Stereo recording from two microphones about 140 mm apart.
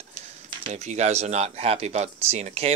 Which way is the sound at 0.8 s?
50° right (ahead or behind).